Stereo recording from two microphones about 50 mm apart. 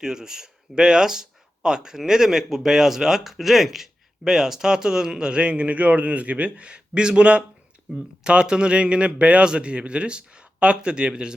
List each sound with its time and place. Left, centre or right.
0.0 s speech: centre